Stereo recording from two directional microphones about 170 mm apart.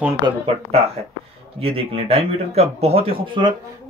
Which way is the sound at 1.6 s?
35° right (ahead or behind).